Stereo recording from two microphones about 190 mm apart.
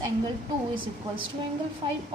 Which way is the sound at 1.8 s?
25° right (ahead or behind).